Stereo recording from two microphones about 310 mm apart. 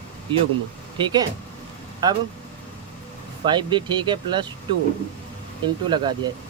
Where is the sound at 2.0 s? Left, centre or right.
Centre.